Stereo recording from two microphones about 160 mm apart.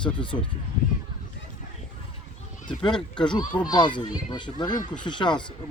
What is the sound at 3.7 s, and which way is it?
Speech, 30° left (ahead or behind).